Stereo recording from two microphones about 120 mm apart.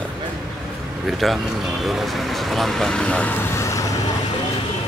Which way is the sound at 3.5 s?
25° left (ahead or behind).